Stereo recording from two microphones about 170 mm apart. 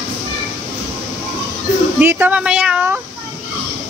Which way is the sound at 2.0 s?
10° right (ahead or behind).